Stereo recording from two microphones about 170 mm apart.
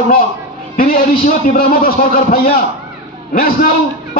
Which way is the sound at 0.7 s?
60° left (ahead or behind).